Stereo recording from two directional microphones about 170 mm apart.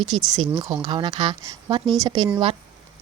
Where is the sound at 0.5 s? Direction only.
25° right (ahead or behind).